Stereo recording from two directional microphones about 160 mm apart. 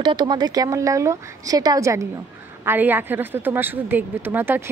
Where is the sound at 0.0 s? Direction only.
25° right (ahead or behind).